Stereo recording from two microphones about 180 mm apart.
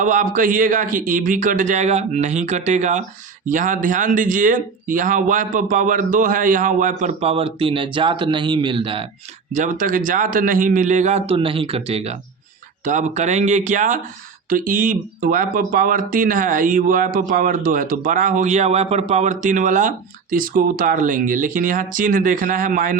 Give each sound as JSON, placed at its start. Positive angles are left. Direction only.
{"t": 0.0, "sound": "speech", "side_deg": -45}
{"t": 9.5, "sound": "speech", "side_deg": -45}